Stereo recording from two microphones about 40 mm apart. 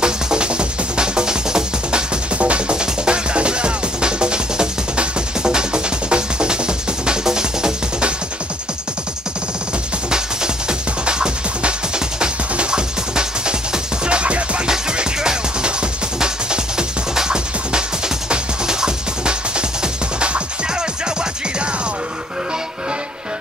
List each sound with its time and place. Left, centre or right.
0.0 s music: right
10.1 s music: centre
14.7 s music: centre